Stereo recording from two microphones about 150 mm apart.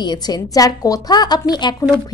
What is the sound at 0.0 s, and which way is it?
A woman's voice, 30° left (ahead or behind).